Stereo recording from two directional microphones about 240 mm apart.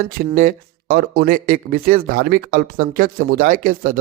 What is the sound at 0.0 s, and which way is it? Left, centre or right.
Speech, right.